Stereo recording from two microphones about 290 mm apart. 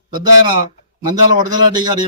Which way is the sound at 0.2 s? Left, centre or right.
Centre.